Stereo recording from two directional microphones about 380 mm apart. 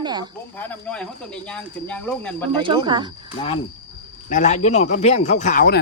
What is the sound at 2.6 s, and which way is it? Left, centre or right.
Speech, centre.